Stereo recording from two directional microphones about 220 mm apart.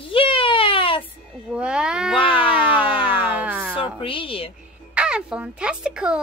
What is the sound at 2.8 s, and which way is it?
Siren, 25° left (ahead or behind).